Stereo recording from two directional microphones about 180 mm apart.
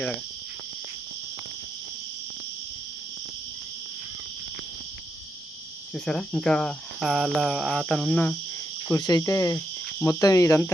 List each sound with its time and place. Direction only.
5.9 s speech: 5° left (ahead or behind)
8.9 s cricket: 20° left (ahead or behind)